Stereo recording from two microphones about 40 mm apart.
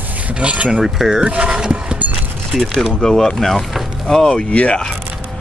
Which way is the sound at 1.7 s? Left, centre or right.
Right.